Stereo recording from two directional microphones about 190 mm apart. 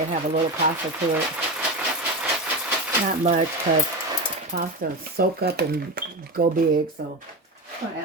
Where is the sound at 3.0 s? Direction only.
40° right (ahead or behind).